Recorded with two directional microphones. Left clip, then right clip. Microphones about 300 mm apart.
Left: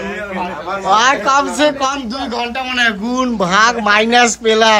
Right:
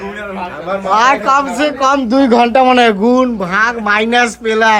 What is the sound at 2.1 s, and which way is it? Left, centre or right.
A man's voice, right.